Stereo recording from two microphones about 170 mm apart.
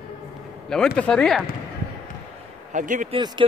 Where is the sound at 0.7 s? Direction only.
5° left (ahead or behind).